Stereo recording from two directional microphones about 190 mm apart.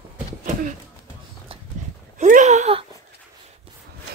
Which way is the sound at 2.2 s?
40° right (ahead or behind).